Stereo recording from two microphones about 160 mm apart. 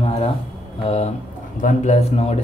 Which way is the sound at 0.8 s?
40° left (ahead or behind).